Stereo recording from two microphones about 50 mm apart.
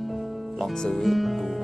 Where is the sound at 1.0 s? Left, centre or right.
Centre.